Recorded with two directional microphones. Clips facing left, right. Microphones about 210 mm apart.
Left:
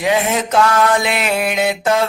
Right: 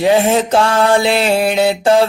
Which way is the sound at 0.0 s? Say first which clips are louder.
Right 5 dB; 30° right (ahead or behind).